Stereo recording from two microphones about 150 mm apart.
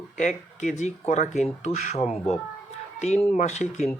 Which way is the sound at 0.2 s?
55° left (ahead or behind).